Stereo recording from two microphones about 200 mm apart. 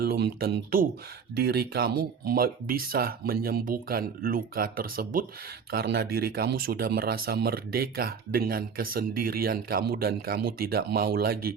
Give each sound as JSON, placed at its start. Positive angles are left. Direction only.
{"t": 0.0, "sound": "speech", "side_deg": -50}